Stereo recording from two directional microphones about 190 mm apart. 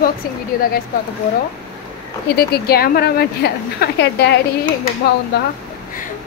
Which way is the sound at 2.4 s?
55° left (ahead or behind).